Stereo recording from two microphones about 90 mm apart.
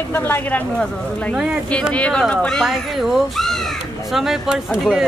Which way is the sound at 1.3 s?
10° right (ahead or behind).